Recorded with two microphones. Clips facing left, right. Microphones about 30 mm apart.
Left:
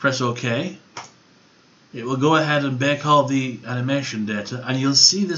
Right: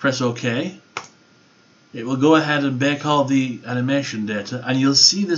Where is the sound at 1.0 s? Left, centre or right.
Right.